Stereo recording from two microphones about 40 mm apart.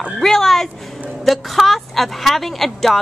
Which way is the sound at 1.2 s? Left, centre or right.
Centre.